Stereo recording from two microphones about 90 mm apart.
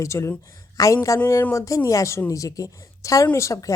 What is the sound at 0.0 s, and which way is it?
Speech, 30° left (ahead or behind).